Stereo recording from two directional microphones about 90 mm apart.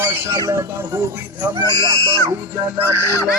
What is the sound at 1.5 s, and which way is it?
Speech, 45° right (ahead or behind).